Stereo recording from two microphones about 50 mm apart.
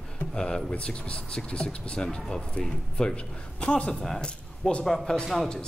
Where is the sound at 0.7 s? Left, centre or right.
Left.